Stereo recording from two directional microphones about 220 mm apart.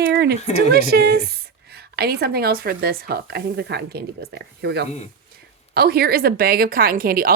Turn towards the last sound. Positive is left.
turn(degrees=-45)  # may be behind; listen again after turning